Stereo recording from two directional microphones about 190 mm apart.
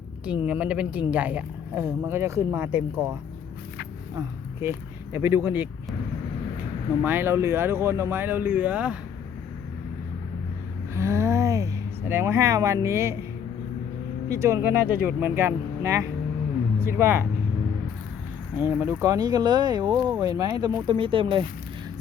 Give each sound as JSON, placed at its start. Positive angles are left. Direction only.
{"t": 0.4, "sound": "speech", "side_deg": -5}
{"t": 4.6, "sound": "speech", "side_deg": -15}
{"t": 7.0, "sound": "speech", "side_deg": -10}
{"t": 10.9, "sound": "speech", "side_deg": -15}
{"t": 14.3, "sound": "speech", "side_deg": -15}
{"t": 18.5, "sound": "speech", "side_deg": -10}